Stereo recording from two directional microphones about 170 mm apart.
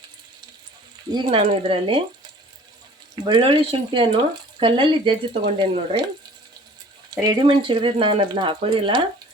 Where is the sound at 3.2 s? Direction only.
30° right (ahead or behind).